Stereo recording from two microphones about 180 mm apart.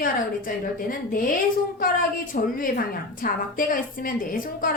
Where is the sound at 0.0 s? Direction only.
50° left (ahead or behind).